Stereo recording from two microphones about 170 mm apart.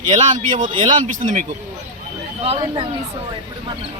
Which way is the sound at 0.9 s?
50° right (ahead or behind).